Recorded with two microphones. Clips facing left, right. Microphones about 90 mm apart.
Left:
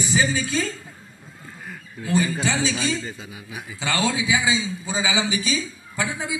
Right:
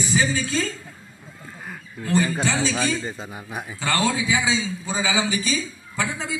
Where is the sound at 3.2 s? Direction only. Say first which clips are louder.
Right 4 dB; 50° right (ahead or behind).